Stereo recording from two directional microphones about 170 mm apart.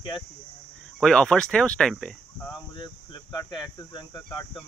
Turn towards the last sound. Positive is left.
turn(degrees=25)  # may be behind; listen again after turning